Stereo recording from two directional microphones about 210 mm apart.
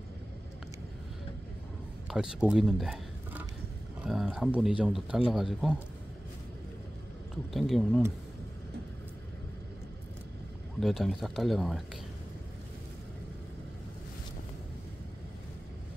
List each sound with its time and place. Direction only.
2.0 s a man's voice: 5° right (ahead or behind)
7.5 s a man's voice: centre (ahead or behind)
10.8 s a man's voice: centre (ahead or behind)